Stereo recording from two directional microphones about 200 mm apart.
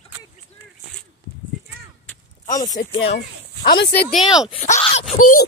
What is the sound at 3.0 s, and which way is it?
Speech, 55° left (ahead or behind).